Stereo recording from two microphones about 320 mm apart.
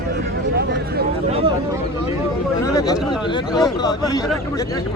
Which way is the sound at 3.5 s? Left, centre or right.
Centre.